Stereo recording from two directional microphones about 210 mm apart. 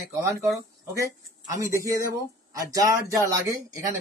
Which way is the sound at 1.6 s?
15° right (ahead or behind).